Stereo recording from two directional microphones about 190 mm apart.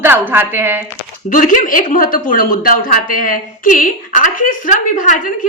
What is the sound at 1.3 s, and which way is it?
A woman's voice, 45° left (ahead or behind).